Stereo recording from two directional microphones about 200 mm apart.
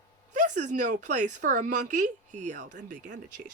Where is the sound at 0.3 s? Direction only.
40° right (ahead or behind).